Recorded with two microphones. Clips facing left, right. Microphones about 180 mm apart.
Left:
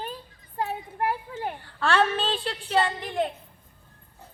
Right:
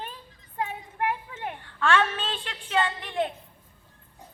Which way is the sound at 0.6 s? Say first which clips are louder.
Left 2 dB; 35° left (ahead or behind).